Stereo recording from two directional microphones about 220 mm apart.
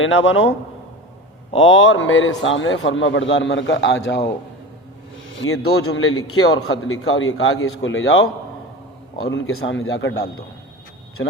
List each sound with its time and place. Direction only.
0.0 s a man's voice: 60° left (ahead or behind)
1.5 s a man's voice: 60° left (ahead or behind)
5.4 s a man's voice: 75° left (ahead or behind)
9.3 s a man's voice: 65° left (ahead or behind)